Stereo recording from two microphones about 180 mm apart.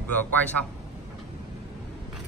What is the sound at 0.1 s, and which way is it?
Speech, 10° left (ahead or behind).